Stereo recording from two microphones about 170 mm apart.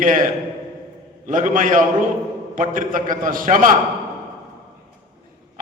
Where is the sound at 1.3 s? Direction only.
50° right (ahead or behind).